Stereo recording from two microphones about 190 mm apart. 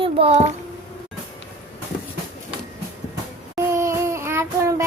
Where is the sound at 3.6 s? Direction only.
15° right (ahead or behind).